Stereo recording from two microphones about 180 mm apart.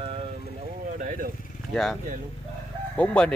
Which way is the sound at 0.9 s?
50° right (ahead or behind).